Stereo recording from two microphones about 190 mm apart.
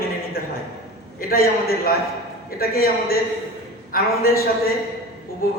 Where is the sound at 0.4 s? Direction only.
50° left (ahead or behind).